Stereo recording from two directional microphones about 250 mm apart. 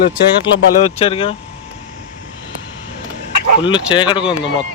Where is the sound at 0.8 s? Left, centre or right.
Left.